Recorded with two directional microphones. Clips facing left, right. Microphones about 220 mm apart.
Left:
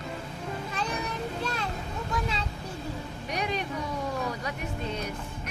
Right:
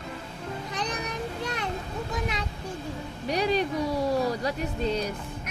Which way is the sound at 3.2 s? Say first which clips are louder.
Right 7 dB; 35° right (ahead or behind).